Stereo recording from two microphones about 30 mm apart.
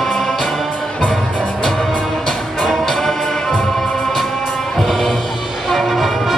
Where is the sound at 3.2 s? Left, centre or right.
Centre.